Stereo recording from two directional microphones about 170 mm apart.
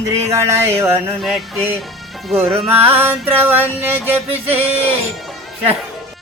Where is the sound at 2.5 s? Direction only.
35° right (ahead or behind).